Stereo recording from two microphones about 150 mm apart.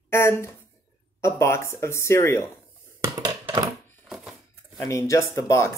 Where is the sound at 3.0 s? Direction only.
25° right (ahead or behind).